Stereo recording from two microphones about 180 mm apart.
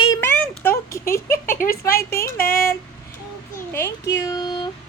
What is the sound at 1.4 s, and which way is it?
Speech, 50° left (ahead or behind).